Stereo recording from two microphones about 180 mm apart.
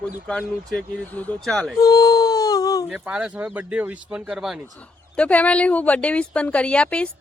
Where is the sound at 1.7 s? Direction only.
20° left (ahead or behind).